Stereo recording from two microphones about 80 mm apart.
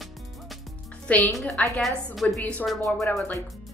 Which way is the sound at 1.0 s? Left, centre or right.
Left.